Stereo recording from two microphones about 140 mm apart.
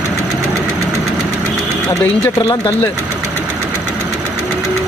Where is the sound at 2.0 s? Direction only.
20° left (ahead or behind).